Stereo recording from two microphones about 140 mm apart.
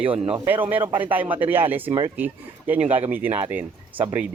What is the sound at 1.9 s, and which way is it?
Speech, 35° right (ahead or behind).